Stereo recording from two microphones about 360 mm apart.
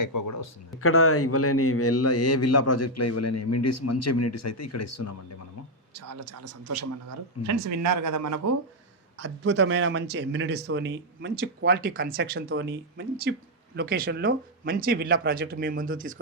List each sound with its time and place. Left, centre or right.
0.0 s a man's voice: left
0.8 s a man's voice: left
5.9 s speech: right
9.1 s a man's voice: right